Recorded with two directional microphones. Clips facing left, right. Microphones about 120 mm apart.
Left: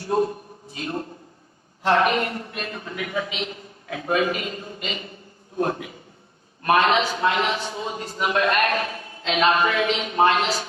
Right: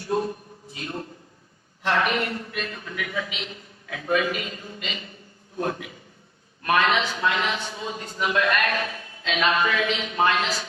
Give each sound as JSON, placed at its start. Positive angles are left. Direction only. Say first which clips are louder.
{"t": 1.8, "sound": "a man's voice", "louder": "left 4 dB", "side_deg": 30}